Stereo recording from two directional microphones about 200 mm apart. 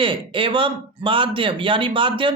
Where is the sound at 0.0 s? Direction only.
25° right (ahead or behind).